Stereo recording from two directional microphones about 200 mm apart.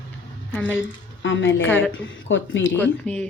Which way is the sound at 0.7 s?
70° left (ahead or behind).